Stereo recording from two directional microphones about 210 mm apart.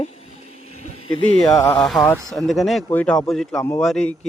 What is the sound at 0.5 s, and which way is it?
Vehicle, 90° left.